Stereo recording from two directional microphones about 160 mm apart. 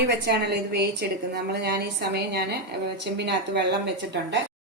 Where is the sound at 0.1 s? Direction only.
90° right.